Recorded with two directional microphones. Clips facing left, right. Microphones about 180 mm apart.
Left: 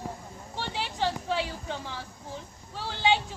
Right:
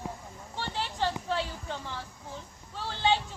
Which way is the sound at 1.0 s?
5° left (ahead or behind).